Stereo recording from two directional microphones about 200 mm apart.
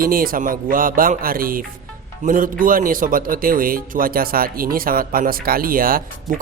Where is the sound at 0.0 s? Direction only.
45° right (ahead or behind).